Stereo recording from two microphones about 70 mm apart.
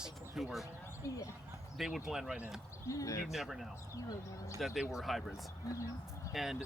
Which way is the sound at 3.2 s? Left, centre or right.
Centre.